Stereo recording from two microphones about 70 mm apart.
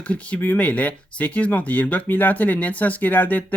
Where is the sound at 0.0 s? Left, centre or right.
Centre.